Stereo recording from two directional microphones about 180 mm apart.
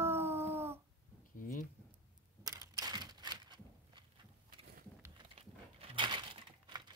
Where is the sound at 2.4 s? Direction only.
20° right (ahead or behind).